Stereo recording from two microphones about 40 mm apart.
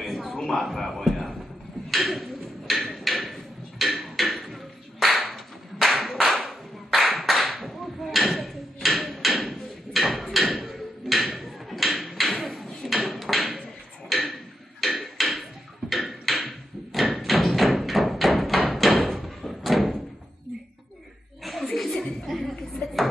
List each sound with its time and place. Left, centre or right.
0.0 s a sound: centre
5.0 s clapping: centre
14.8 s hammer: centre
15.9 s a sound: centre
17.1 s thump: centre
21.5 s chuckle: centre